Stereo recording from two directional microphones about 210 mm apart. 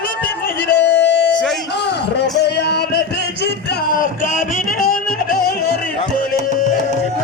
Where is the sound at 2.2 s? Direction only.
50° left (ahead or behind).